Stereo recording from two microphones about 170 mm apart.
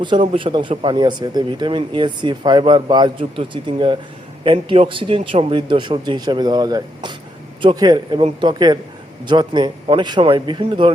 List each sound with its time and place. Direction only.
0.0 s speech: 30° right (ahead or behind)